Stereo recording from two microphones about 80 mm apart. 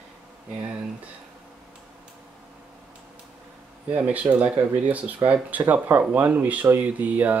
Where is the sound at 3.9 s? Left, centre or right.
Centre.